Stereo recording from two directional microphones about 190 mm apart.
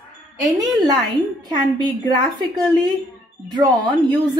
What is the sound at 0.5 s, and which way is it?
A woman's voice, 20° right (ahead or behind).